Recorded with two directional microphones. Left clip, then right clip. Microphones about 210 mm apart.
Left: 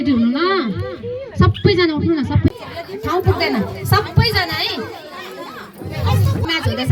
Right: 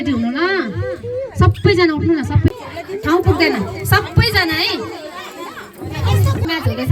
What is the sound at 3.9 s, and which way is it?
Music, 45° right (ahead or behind).